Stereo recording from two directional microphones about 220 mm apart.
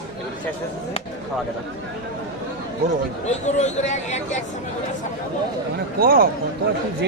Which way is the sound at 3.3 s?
30° left (ahead or behind).